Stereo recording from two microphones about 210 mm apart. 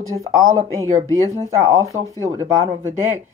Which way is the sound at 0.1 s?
15° right (ahead or behind).